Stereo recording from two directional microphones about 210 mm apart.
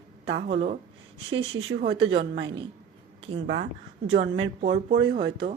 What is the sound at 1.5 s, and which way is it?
Speech, 70° right (ahead or behind).